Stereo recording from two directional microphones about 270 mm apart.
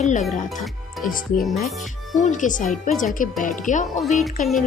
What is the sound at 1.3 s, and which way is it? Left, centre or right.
Music, centre.